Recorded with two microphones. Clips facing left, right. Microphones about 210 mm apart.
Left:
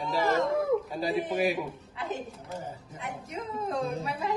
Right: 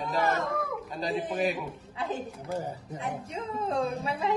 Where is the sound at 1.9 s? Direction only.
30° right (ahead or behind).